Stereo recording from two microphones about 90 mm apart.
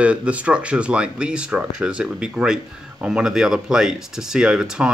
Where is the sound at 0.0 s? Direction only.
15° right (ahead or behind).